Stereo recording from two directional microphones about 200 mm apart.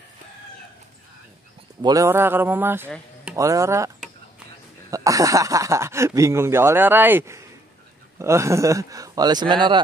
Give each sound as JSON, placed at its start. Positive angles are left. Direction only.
{"t": 1.8, "sound": "speech", "side_deg": -20}
{"t": 4.9, "sound": "speech", "side_deg": -15}